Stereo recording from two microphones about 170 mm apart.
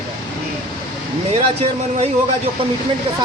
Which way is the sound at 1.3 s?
35° right (ahead or behind).